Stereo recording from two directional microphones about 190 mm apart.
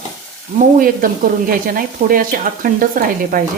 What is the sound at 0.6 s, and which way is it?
Speech, 45° right (ahead or behind).